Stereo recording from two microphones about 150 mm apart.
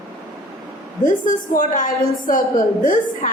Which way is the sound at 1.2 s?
60° left (ahead or behind).